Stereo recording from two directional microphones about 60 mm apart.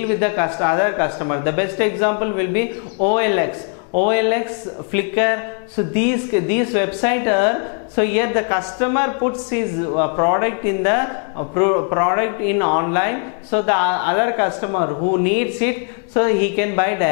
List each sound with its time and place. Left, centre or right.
0.0 s speech: centre